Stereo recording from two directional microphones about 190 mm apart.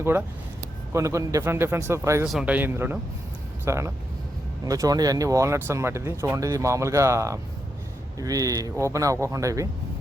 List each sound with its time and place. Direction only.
0.0 s speech: 10° right (ahead or behind)
2.2 s a man's voice: 5° right (ahead or behind)